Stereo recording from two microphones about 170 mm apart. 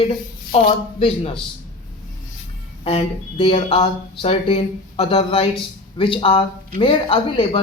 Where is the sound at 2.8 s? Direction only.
35° left (ahead or behind).